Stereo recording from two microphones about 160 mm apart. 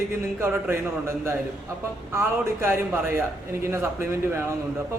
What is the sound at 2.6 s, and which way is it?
Speech, 15° right (ahead or behind).